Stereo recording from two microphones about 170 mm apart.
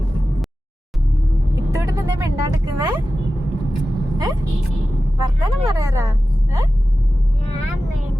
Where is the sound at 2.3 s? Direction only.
25° right (ahead or behind).